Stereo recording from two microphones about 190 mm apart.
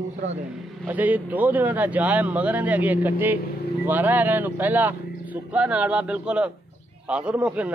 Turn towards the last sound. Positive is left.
turn(degrees=-5)  # may be behind; listen again after turning